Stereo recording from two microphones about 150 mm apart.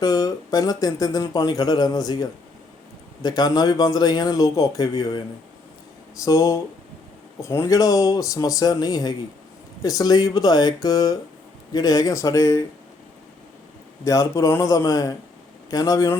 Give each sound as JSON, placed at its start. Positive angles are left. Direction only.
{"t": 0.0, "sound": "speech", "side_deg": 25}
{"t": 3.2, "sound": "speech", "side_deg": 25}
{"t": 6.2, "sound": "speech", "side_deg": 20}
{"t": 14.0, "sound": "speech", "side_deg": 20}